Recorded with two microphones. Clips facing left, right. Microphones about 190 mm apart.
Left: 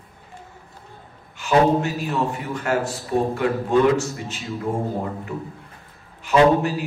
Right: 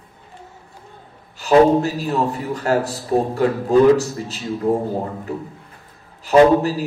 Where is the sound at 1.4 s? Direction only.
35° right (ahead or behind).